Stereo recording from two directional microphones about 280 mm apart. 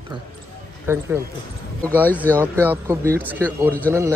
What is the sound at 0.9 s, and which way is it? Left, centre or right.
A man's voice, centre.